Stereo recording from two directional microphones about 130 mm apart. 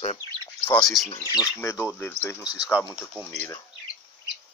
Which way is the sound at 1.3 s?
25° left (ahead or behind).